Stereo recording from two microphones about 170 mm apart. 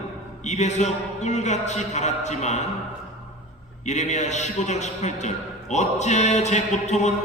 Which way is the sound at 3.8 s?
45° left (ahead or behind).